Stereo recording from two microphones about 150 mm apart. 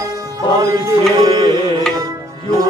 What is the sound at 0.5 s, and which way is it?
Music, 25° right (ahead or behind).